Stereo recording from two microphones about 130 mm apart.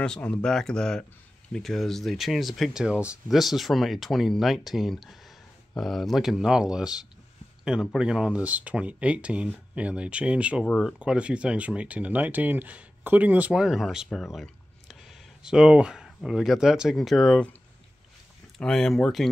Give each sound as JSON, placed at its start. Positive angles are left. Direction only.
{"t": 0.0, "sound": "speech", "side_deg": 5}
{"t": 18.6, "sound": "speech", "side_deg": 5}